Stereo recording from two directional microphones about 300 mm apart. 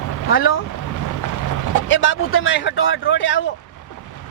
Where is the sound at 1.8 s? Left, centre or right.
Left.